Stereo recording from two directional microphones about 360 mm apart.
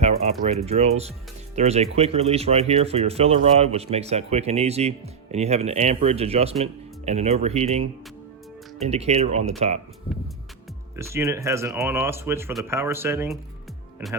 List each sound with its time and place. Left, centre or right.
0.4 s speech: centre
10.9 s speech: centre